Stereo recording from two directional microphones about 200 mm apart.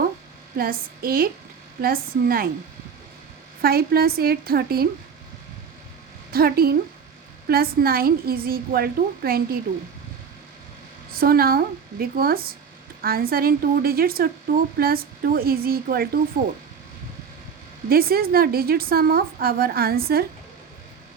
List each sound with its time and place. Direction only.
0.5 s a woman's voice: 45° right (ahead or behind)
3.6 s a woman's voice: 50° right (ahead or behind)
6.3 s a woman's voice: 50° right (ahead or behind)
11.1 s a woman's voice: 50° right (ahead or behind)
17.8 s a woman's voice: 50° right (ahead or behind)